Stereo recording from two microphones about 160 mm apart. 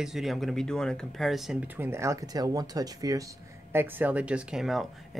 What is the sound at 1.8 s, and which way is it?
Speech, 15° right (ahead or behind).